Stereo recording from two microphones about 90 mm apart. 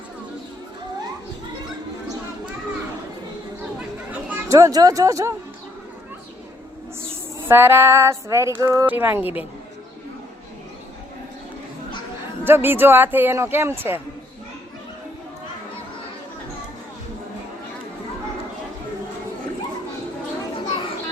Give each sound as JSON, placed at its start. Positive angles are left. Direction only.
{"t": 3.8, "sound": "chatter", "side_deg": -20}
{"t": 4.4, "sound": "female singing", "side_deg": -35}
{"t": 7.4, "sound": "female singing", "side_deg": -25}
{"t": 8.9, "sound": "speech", "side_deg": -25}
{"t": 12.5, "sound": "speech", "side_deg": -25}